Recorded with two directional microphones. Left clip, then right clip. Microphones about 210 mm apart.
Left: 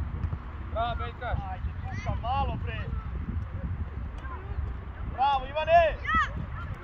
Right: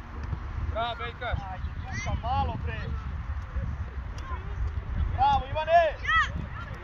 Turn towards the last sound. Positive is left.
turn(degrees=0)  # may be behind; listen again after turning